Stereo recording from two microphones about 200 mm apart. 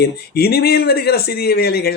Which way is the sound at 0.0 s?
50° left (ahead or behind).